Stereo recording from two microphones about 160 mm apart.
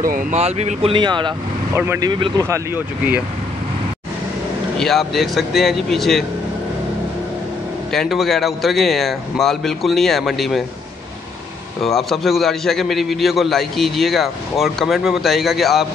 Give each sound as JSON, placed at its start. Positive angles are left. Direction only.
{"t": 0.0, "sound": "speech", "side_deg": -60}
{"t": 0.4, "sound": "speech", "side_deg": -40}
{"t": 2.4, "sound": "speech", "side_deg": -15}
{"t": 4.7, "sound": "a man's voice", "side_deg": 0}
{"t": 7.9, "sound": "a man's voice", "side_deg": 0}
{"t": 11.8, "sound": "a man's voice", "side_deg": 0}